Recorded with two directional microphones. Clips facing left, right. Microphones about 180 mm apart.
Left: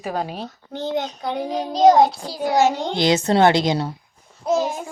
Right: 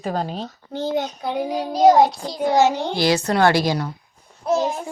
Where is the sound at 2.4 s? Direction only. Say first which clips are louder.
Right 1 dB; 15° right (ahead or behind).